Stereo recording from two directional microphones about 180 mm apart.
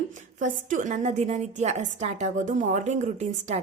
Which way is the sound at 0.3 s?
45° right (ahead or behind).